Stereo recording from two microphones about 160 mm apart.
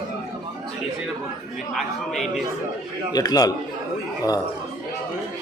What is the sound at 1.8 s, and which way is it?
Speech, centre (ahead or behind).